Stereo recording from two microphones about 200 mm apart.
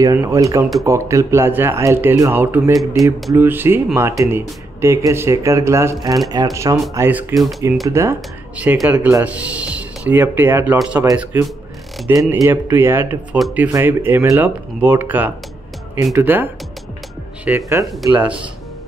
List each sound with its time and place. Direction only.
0.0 s speech: 15° right (ahead or behind)
3.0 s speech: centre (ahead or behind)
3.3 s speech: 10° right (ahead or behind)
17.5 s speech: 15° right (ahead or behind)